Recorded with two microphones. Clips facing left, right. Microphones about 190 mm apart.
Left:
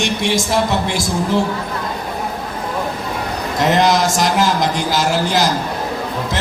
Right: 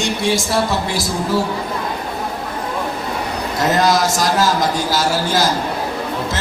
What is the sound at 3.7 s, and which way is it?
A man's voice, 20° left (ahead or behind).